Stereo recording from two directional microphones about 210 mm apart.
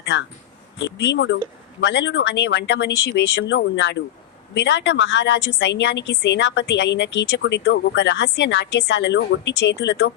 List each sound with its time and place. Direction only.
0.0 s a woman's voice: 55° left (ahead or behind)